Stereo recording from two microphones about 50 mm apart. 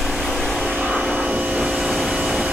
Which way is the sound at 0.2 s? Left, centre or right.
Centre.